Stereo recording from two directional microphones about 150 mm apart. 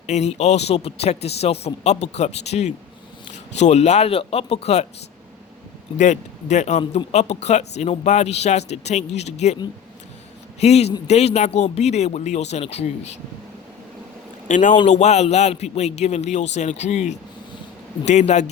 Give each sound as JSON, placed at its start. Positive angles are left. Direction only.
{"t": 0.1, "sound": "speech", "side_deg": 50}
{"t": 6.0, "sound": "speech", "side_deg": 50}
{"t": 10.6, "sound": "speech", "side_deg": 45}
{"t": 14.4, "sound": "a man's voice", "side_deg": 55}